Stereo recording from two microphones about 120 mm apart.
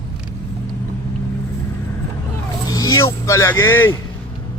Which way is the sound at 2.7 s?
30° left (ahead or behind).